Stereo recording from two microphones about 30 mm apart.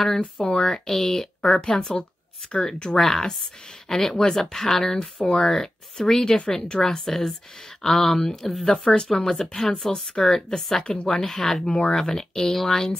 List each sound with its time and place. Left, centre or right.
0.5 s speech: left
3.0 s speech: centre
5.2 s speech: left
5.5 s speech: centre
8.5 s speech: centre
8.8 s speech: left
9.1 s speech: centre